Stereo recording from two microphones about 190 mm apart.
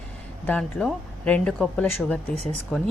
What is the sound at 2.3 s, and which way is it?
Speech, 35° right (ahead or behind).